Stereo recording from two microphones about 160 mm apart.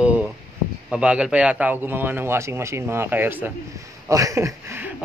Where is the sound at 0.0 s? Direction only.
5° right (ahead or behind).